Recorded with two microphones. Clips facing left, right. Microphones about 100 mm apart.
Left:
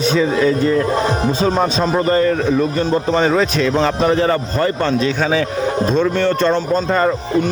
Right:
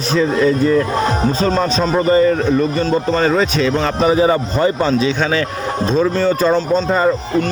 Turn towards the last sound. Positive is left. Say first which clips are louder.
# right 1 dB
turn(degrees=-5)  # may be behind; listen again after turning